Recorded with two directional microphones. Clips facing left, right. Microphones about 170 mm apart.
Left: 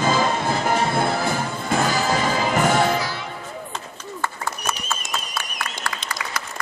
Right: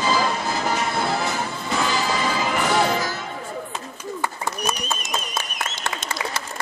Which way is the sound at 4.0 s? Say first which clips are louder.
Right 1 dB; 15° right (ahead or behind).